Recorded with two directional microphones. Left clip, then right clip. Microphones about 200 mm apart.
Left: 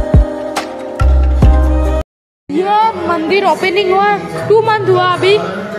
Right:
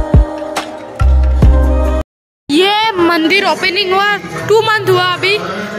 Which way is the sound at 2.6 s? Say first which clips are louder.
Left 1 dB; 15° right (ahead or behind).